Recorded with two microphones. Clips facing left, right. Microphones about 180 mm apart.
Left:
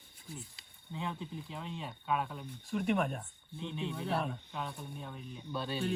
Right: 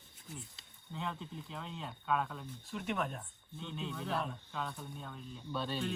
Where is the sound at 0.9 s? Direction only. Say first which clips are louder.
Left 2 dB; 5° left (ahead or behind).